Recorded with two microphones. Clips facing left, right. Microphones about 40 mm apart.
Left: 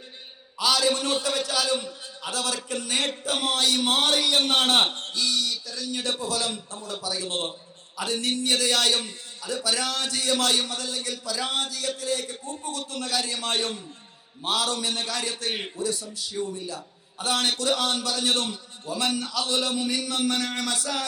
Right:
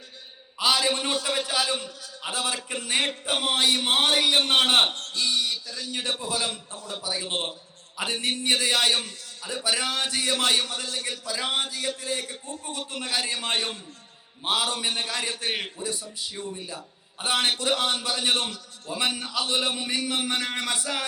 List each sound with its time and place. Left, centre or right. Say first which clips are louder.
0.6 s a man's voice: left 1 dB; right